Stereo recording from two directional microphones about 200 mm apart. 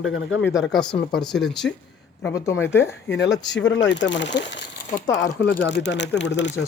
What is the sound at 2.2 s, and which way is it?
Speech, 15° left (ahead or behind).